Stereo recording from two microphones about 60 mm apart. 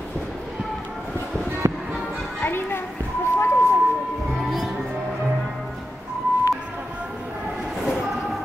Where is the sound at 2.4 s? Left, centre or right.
Left.